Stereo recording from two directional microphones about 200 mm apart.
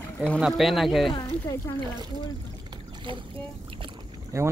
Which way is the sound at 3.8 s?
15° right (ahead or behind).